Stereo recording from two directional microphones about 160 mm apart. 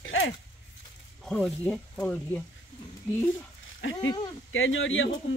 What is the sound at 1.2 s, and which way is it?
Speech, 5° left (ahead or behind).